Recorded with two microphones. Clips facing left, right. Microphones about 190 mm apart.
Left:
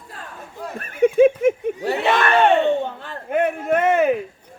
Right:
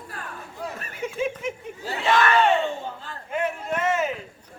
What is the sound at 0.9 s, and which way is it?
Speech, 55° left (ahead or behind).